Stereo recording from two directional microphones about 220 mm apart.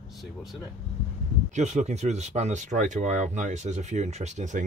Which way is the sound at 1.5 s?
30° right (ahead or behind).